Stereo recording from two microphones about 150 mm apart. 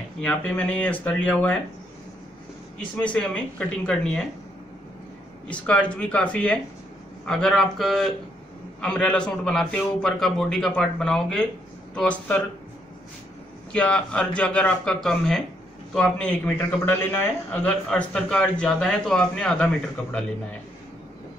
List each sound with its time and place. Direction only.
0.2 s a man's voice: 10° left (ahead or behind)
3.0 s a man's voice: 10° left (ahead or behind)
5.5 s a man's voice: 10° left (ahead or behind)
13.7 s a man's voice: 5° left (ahead or behind)